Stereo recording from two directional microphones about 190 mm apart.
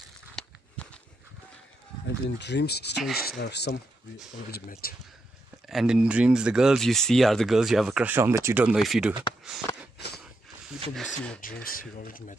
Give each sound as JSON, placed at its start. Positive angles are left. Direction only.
{"t": 0.4, "sound": "walk", "side_deg": 5}
{"t": 2.0, "sound": "speech", "side_deg": 65}
{"t": 5.7, "sound": "speech", "side_deg": 0}
{"t": 9.7, "sound": "a sound", "side_deg": 20}
{"t": 11.0, "sound": "speech", "side_deg": 0}
{"t": 11.4, "sound": "speech", "side_deg": 50}